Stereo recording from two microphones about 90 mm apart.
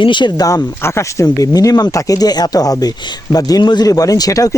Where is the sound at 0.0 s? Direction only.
60° left (ahead or behind).